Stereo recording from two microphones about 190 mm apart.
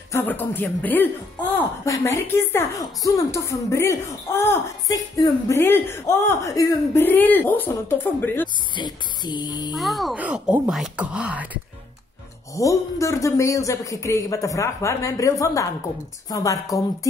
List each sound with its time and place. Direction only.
0.1 s speech: 10° left (ahead or behind)
8.7 s speech: 20° left (ahead or behind)
9.8 s speech: centre (ahead or behind)
12.5 s speech: 15° left (ahead or behind)